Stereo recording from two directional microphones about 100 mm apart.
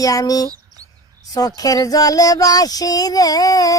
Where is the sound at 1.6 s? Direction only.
35° left (ahead or behind).